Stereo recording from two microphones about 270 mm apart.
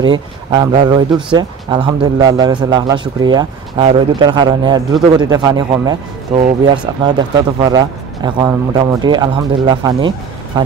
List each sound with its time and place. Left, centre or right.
0.0 s a man's voice: centre